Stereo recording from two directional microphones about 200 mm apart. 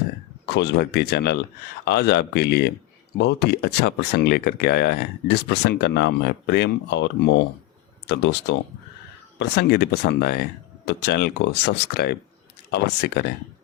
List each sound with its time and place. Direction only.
0.4 s speech: 60° left (ahead or behind)